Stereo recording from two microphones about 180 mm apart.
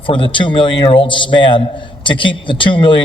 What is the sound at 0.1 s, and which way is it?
A man's voice, 25° left (ahead or behind).